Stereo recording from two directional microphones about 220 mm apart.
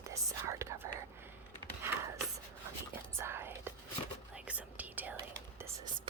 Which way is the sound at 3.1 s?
10° right (ahead or behind).